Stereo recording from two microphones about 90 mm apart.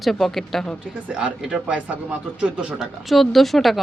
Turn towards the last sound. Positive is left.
turn(degrees=0)  # may be behind; listen again after turning